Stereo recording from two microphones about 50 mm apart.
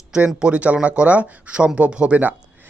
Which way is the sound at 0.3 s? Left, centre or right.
Right.